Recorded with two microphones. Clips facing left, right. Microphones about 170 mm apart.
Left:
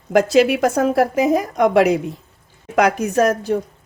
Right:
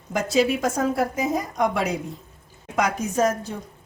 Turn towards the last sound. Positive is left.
turn(degrees=70)  # may be behind; listen again after turning